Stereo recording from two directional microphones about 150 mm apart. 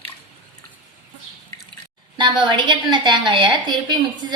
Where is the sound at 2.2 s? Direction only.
30° right (ahead or behind).